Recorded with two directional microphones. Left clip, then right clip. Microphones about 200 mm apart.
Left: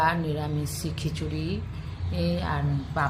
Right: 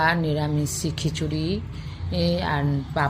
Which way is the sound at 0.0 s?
30° right (ahead or behind).